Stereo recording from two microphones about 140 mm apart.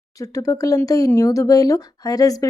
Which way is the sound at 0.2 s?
25° left (ahead or behind).